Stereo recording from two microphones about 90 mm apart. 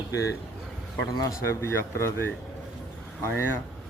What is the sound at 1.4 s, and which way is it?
Speech, 30° left (ahead or behind).